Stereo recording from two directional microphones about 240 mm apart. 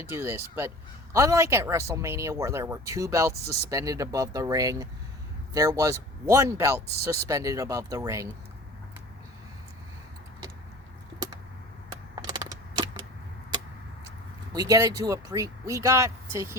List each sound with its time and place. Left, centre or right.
0.0 s speech: centre
12.1 s a sound: centre
14.5 s speech: centre